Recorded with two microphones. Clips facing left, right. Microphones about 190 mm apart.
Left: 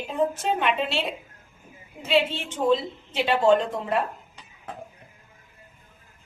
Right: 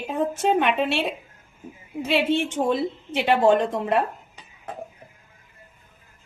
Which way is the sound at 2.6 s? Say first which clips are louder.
Left 1 dB; 60° right (ahead or behind).